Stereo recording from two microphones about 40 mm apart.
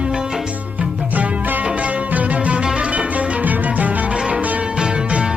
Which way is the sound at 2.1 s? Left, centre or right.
Right.